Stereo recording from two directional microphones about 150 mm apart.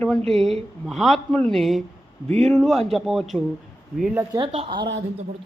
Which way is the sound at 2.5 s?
5° left (ahead or behind).